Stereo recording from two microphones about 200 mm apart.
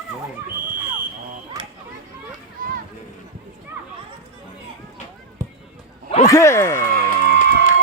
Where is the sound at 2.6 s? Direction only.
45° right (ahead or behind).